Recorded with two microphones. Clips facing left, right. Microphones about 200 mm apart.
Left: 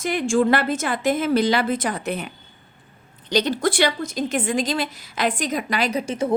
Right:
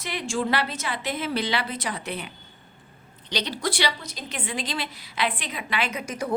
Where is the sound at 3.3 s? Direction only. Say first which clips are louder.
Left 8 dB; 45° left (ahead or behind); by 6.3 s 25° left (ahead or behind).